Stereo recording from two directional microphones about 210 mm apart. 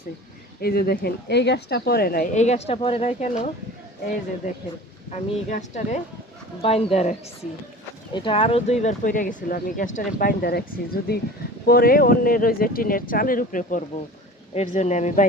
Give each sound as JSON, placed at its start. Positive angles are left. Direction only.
{"t": 0.6, "sound": "a woman's voice", "side_deg": 50}
{"t": 5.5, "sound": "a woman's voice", "side_deg": 35}